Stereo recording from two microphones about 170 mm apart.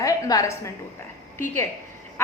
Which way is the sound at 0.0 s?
20° left (ahead or behind).